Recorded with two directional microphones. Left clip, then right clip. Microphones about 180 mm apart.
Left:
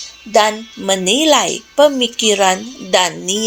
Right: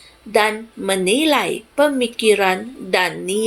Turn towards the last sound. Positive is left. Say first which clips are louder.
# left 3 dB
turn(degrees=45)  # may be behind; listen again after turning